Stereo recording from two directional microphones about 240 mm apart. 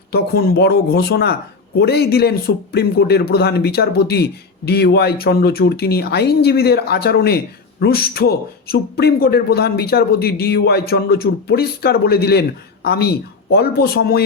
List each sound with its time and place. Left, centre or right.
0.1 s a man's voice: left